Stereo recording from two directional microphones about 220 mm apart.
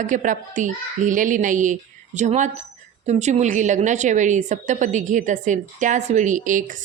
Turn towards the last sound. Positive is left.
turn(degrees=-35)  # may be behind; listen again after turning